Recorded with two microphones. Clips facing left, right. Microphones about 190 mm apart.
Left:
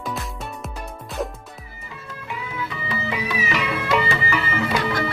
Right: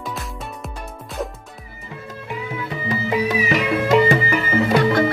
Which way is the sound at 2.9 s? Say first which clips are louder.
Right 8 dB; 40° right (ahead or behind).